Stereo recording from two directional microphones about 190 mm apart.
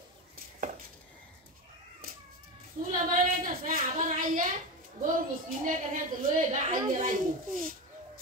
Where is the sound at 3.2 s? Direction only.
50° right (ahead or behind).